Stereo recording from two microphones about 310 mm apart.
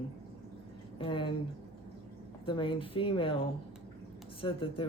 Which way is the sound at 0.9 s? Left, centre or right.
Centre.